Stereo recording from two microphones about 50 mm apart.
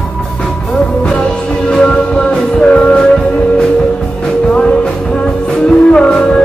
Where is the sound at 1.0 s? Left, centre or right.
Centre.